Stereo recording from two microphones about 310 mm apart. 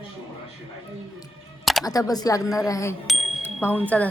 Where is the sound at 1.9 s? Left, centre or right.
Centre.